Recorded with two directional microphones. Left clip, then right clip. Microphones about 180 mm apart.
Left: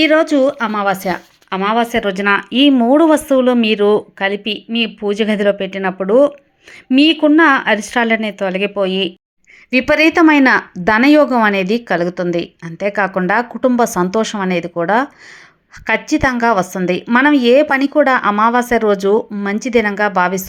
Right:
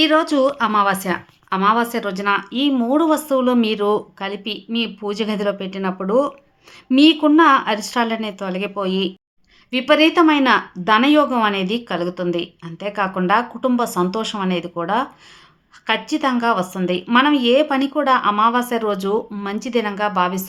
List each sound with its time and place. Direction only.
0.0 s speech: 20° left (ahead or behind)
9.6 s speech: 35° left (ahead or behind)